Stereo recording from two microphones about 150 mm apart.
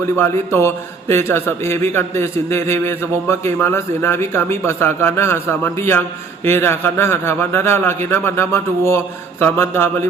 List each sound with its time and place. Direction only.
0.0 s a man's voice: 15° left (ahead or behind)